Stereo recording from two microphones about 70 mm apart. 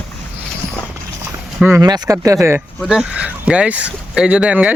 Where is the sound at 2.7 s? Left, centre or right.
Centre.